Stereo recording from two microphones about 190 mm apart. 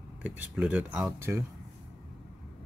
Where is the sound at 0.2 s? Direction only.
5° right (ahead or behind).